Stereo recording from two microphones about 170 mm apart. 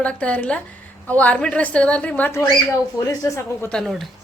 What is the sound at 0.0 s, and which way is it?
A woman's voice, 5° left (ahead or behind).